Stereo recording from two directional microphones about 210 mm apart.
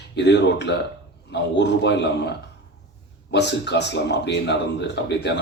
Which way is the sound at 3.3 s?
55° left (ahead or behind).